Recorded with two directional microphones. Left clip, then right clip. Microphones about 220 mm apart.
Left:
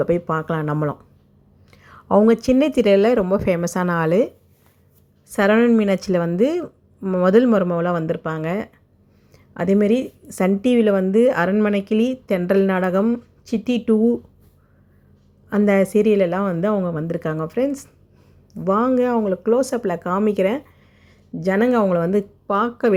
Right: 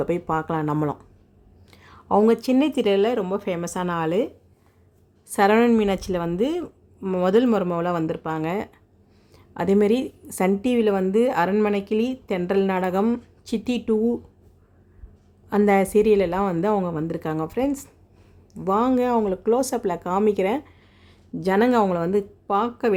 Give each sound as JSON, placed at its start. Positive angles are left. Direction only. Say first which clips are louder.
{"t": 0.0, "sound": "a woman's voice", "louder": "left 4 dB", "side_deg": 10}
{"t": 5.3, "sound": "a woman's voice", "louder": "left 2 dB", "side_deg": 5}
{"t": 5.8, "sound": "a woman's voice", "louder": "left 4 dB", "side_deg": 15}
{"t": 7.0, "sound": "a woman's voice", "louder": "left 3 dB", "side_deg": 0}
{"t": 7.3, "sound": "a woman's voice", "louder": "left 4 dB", "side_deg": 15}
{"t": 15.4, "sound": "a woman's voice", "louder": "left 1 dB", "side_deg": 10}